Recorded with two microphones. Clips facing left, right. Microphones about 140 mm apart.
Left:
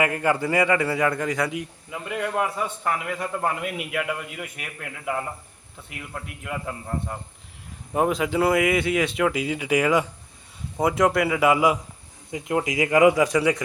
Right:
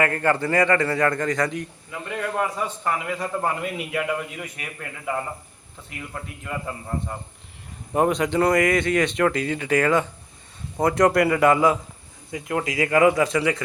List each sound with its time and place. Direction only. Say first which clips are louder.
0.0 s a man's voice: right 1 dB; 10° left (ahead or behind)
12.3 s a man's voice: left 1 dB; 20° left (ahead or behind)